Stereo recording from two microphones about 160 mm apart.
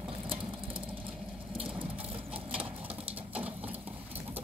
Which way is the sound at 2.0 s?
35° right (ahead or behind).